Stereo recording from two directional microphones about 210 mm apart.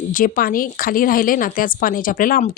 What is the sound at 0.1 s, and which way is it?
A woman's voice, 40° left (ahead or behind).